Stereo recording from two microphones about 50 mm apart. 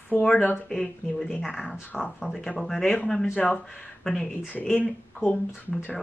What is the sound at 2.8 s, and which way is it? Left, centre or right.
Speech, left.